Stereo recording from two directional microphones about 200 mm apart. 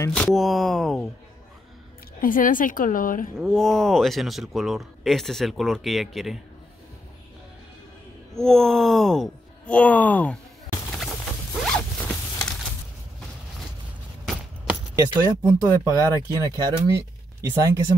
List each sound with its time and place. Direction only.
0.0 s speech: 5° left (ahead or behind)
2.1 s a woman's voice: 45° left (ahead or behind)
3.3 s speech: centre (ahead or behind)
8.4 s speech: centre (ahead or behind)
11.0 s zipper: centre (ahead or behind)
14.2 s keys jangling: 5° right (ahead or behind)
15.0 s speech: 15° right (ahead or behind)